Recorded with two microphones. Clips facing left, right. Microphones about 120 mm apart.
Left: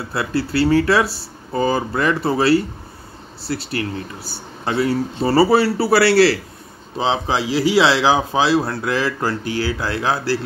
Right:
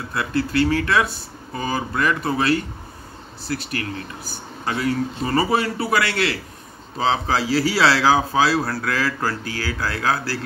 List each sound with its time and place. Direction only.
0.1 s speech: 30° left (ahead or behind)
7.0 s a man's voice: 20° left (ahead or behind)